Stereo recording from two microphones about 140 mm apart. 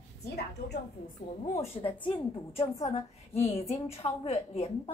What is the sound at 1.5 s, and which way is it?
A woman's voice, 40° left (ahead or behind).